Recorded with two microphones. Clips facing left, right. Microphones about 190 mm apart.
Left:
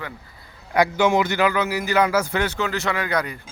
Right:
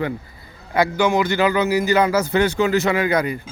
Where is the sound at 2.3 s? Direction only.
10° right (ahead or behind).